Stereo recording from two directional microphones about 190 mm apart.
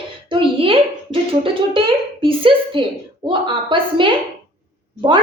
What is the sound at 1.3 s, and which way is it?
A woman's voice, 30° right (ahead or behind).